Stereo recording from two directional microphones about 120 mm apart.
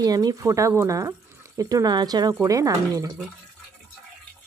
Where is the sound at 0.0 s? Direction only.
35° right (ahead or behind).